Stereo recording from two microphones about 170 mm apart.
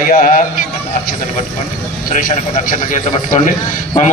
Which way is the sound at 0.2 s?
55° left (ahead or behind).